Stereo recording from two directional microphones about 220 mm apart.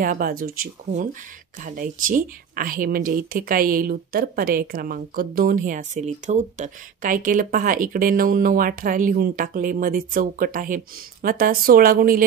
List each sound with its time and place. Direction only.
0.0 s speech: 40° right (ahead or behind)